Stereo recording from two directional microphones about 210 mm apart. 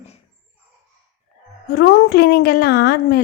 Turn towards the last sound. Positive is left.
turn(degrees=50)  # may be behind; listen again after turning